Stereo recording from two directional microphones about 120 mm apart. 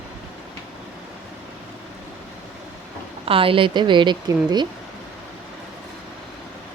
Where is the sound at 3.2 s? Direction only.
50° right (ahead or behind).